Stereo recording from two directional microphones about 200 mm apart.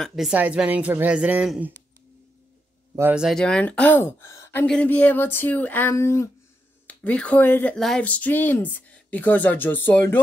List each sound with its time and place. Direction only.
0.0 s speech: centre (ahead or behind)
3.0 s speech: 5° right (ahead or behind); by 10.2 s 10° left (ahead or behind)